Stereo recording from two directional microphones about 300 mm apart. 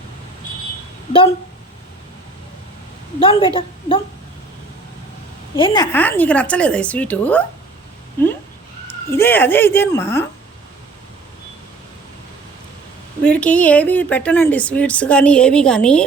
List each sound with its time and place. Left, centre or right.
3.2 s speech: centre
5.5 s speech: centre
13.2 s speech: centre